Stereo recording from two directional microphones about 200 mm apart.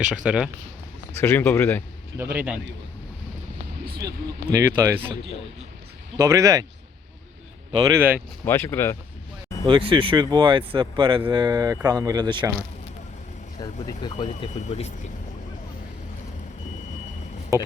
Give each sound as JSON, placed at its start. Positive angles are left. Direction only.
{"t": 0.1, "sound": "speech", "side_deg": -5}
{"t": 1.1, "sound": "speech", "side_deg": 10}
{"t": 2.1, "sound": "speech", "side_deg": -10}
{"t": 4.0, "sound": "speech", "side_deg": -15}
{"t": 6.1, "sound": "speech", "side_deg": -15}
{"t": 7.9, "sound": "speech", "side_deg": -10}
{"t": 8.4, "sound": "speech", "side_deg": 10}
{"t": 9.6, "sound": "speech", "side_deg": -25}
{"t": 13.6, "sound": "speech", "side_deg": 20}
{"t": 14.2, "sound": "speech", "side_deg": 35}
{"t": 17.5, "sound": "speech", "side_deg": -15}